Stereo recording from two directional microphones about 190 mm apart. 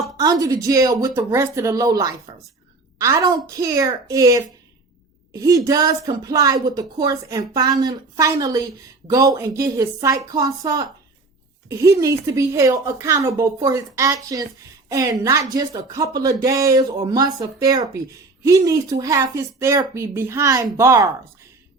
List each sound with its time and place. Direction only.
0.2 s a woman's voice: 20° right (ahead or behind)